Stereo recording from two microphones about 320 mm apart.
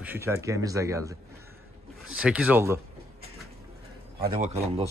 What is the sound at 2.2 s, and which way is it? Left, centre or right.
Speech, centre.